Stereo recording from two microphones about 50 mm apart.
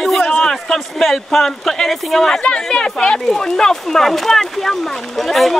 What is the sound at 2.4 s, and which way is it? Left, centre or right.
Speech, centre.